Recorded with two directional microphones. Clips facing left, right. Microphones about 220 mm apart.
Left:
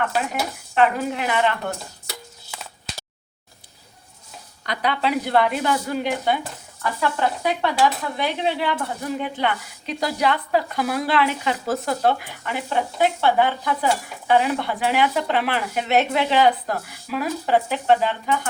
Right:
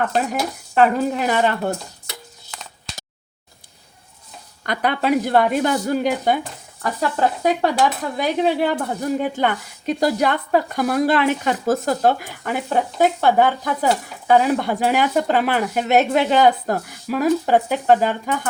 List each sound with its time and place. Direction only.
0.7 s a woman's voice: 40° right (ahead or behind)
2.5 s a sound: 5° left (ahead or behind)
4.6 s cutlery: 50° right (ahead or behind)
7.0 s a woman's voice: 40° right (ahead or behind)
8.2 s cutlery: 45° right (ahead or behind)